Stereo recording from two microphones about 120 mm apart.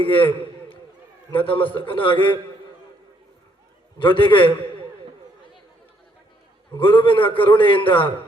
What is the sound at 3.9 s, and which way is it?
Speech, 45° left (ahead or behind).